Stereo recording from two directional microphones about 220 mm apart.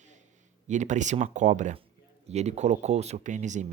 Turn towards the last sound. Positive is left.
turn(degrees=-35)  # may be behind; listen again after turning